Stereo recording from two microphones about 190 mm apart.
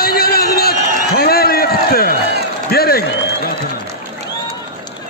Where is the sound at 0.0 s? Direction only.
50° left (ahead or behind).